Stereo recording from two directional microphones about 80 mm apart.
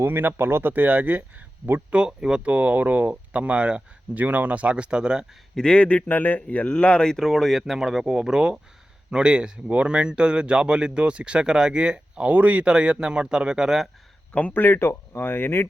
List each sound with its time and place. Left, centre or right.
0.0 s speech: right; by 5.2 s centre
5.5 s a man's voice: centre
14.3 s speech: left